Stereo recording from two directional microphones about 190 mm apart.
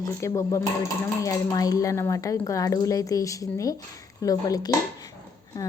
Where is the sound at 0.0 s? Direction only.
15° left (ahead or behind).